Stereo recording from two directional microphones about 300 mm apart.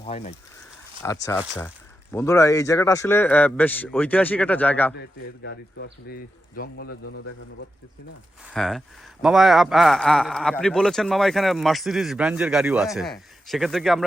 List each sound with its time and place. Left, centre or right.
0.0 s speech: centre
1.0 s speech: centre
4.9 s speech: left
6.8 s a man's voice: left
8.4 s speech: centre